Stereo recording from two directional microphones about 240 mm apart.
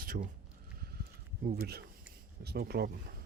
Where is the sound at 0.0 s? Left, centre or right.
Right.